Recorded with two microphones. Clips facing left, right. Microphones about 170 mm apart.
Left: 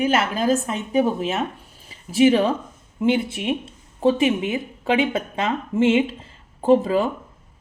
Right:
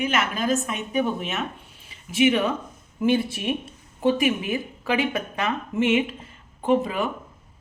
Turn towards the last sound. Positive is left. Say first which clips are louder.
# left 5 dB
turn(degrees=30)  # may be behind; listen again after turning